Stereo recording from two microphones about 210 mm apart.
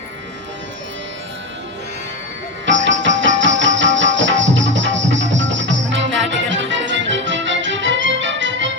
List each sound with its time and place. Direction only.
2.6 s music: 60° right (ahead or behind)